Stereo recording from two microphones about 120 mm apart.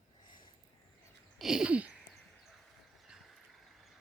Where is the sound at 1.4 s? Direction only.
5° right (ahead or behind).